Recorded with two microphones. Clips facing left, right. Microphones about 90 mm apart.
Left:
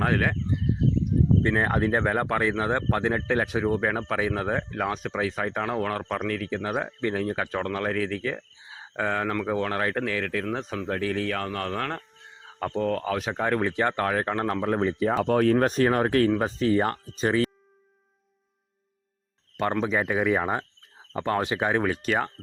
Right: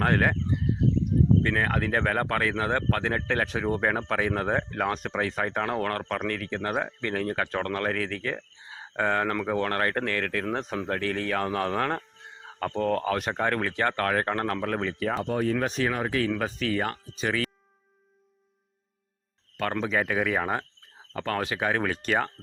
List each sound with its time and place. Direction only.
0.0 s a sound: centre (ahead or behind)
1.4 s speech: 25° left (ahead or behind); by 12.0 s 5° right (ahead or behind)
12.5 s speech: 5° left (ahead or behind); by 15.2 s 25° left (ahead or behind)
15.2 s speech: 70° left (ahead or behind)
15.5 s speech: 45° left (ahead or behind)
16.3 s speech: 25° left (ahead or behind)
19.9 s speech: 5° left (ahead or behind)
20.3 s speech: 15° left (ahead or behind)
21.8 s speech: 10° left (ahead or behind)